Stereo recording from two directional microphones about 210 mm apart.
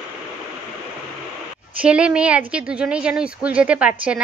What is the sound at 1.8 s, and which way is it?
Speech, 5° right (ahead or behind).